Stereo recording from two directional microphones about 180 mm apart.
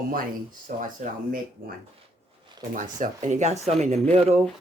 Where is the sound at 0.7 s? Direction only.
45° right (ahead or behind).